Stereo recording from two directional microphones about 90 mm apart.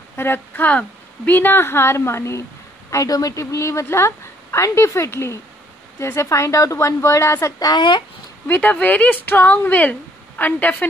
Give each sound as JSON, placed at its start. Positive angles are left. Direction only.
{"t": 0.1, "sound": "speech", "side_deg": 25}
{"t": 2.9, "sound": "a woman's voice", "side_deg": 40}
{"t": 7.5, "sound": "speech", "side_deg": 50}
{"t": 8.5, "sound": "speech", "side_deg": 15}